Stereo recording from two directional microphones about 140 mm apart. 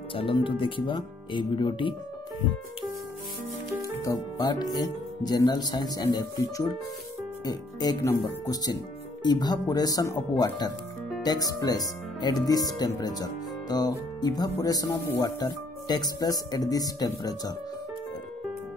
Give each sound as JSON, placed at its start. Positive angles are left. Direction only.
{"t": 0.1, "sound": "speech", "side_deg": 40}
{"t": 4.0, "sound": "speech", "side_deg": 25}